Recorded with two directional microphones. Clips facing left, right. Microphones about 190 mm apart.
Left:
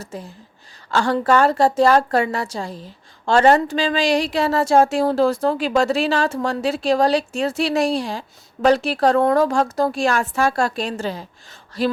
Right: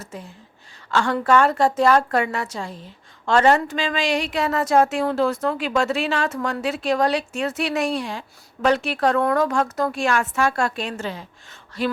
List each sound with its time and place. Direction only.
0.0 s a woman's voice: 35° left (ahead or behind)